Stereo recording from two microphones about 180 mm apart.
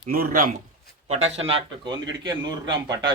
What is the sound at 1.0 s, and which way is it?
A man's voice, 35° right (ahead or behind).